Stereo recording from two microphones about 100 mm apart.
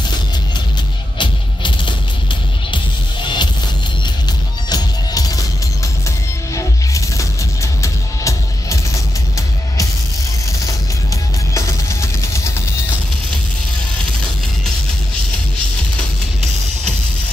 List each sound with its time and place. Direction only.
1.1 s music: 50° left (ahead or behind)
4.6 s music: 40° left (ahead or behind)
6.5 s music: 30° left (ahead or behind)
11.5 s music: 30° left (ahead or behind)